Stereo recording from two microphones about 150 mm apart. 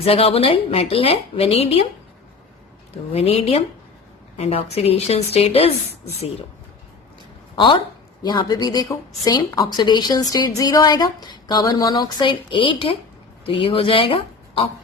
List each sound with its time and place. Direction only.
0.0 s a woman's voice: 40° left (ahead or behind)
3.1 s a woman's voice: 40° left (ahead or behind)
7.5 s a woman's voice: 35° left (ahead or behind)